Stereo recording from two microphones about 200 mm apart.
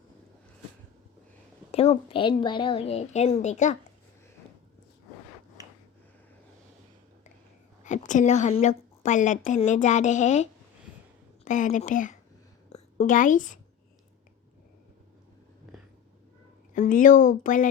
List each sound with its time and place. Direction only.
1.7 s a woman's voice: 30° left (ahead or behind)
7.9 s a woman's voice: 40° left (ahead or behind)
16.7 s a woman's voice: 40° left (ahead or behind)